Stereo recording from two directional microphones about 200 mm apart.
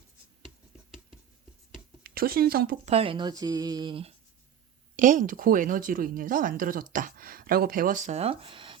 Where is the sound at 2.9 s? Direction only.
30° right (ahead or behind).